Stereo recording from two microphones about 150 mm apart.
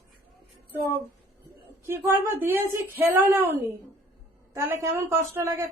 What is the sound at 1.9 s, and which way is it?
A woman's voice, 15° right (ahead or behind).